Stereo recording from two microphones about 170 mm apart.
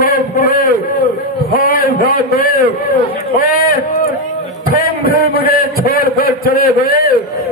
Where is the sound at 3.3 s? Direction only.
55° left (ahead or behind).